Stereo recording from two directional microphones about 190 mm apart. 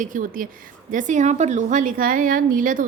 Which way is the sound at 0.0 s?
45° right (ahead or behind).